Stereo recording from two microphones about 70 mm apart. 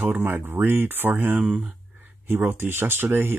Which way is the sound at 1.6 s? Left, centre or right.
Right.